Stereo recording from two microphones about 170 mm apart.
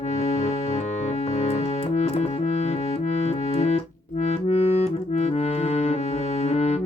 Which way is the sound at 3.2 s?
40° left (ahead or behind).